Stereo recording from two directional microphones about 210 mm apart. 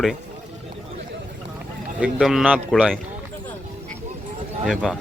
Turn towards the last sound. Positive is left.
turn(degrees=0)  # may be behind; listen again after turning